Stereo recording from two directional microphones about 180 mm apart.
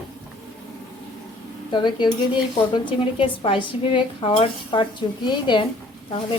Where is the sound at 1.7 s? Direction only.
25° left (ahead or behind).